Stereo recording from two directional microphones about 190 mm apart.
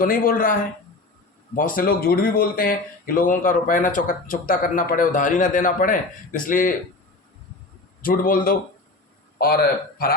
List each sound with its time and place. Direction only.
0.0 s speech: 45° left (ahead or behind)
1.5 s speech: 45° left (ahead or behind)
8.0 s speech: 50° left (ahead or behind)